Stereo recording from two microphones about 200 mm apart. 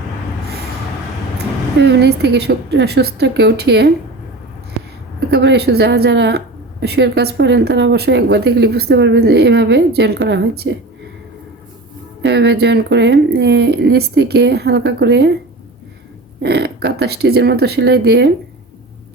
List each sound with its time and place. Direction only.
1.8 s a woman's voice: 60° right (ahead or behind)
5.3 s a woman's voice: 55° right (ahead or behind)
12.2 s a woman's voice: 55° right (ahead or behind)
16.4 s a woman's voice: 55° right (ahead or behind)